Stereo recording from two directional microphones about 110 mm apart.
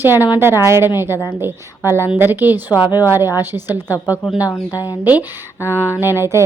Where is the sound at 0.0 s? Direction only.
20° right (ahead or behind).